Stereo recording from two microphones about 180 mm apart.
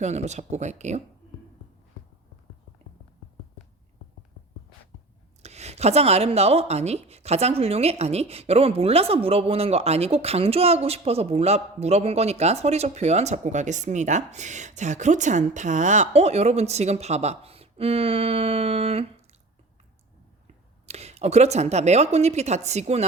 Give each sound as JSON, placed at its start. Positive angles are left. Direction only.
{"t": 0.0, "sound": "speech", "side_deg": -40}
{"t": 5.4, "sound": "speech", "side_deg": -35}
{"t": 20.8, "sound": "speech", "side_deg": -35}